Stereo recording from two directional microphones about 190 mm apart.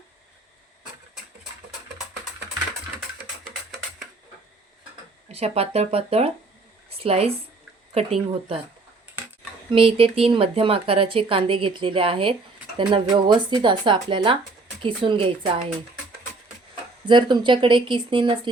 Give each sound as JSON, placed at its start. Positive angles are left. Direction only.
{"t": 5.3, "sound": "speech", "side_deg": -30}
{"t": 9.6, "sound": "a woman's voice", "side_deg": -30}
{"t": 17.1, "sound": "a woman's voice", "side_deg": -25}